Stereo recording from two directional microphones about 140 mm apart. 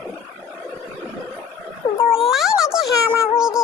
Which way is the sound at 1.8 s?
30° left (ahead or behind).